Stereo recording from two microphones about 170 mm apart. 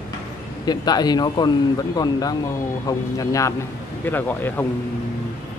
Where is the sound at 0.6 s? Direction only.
25° left (ahead or behind).